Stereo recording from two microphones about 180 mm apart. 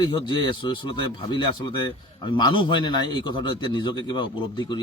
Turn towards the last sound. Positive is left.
turn(degrees=25)  # may be behind; listen again after turning